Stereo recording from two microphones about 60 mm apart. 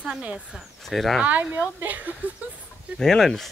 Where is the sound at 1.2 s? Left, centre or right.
Right.